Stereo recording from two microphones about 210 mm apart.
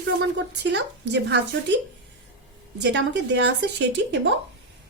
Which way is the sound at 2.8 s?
55° right (ahead or behind).